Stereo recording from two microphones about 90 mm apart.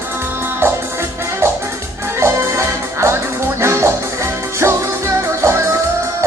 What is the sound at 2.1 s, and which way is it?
Music, 30° right (ahead or behind).